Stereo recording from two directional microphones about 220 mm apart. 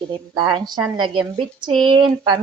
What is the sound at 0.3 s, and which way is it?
A woman's voice, 20° right (ahead or behind).